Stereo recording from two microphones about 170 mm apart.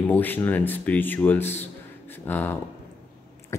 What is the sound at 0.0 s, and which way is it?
Speech, 10° left (ahead or behind).